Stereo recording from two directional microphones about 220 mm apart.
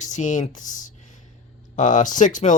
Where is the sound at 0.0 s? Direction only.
35° left (ahead or behind).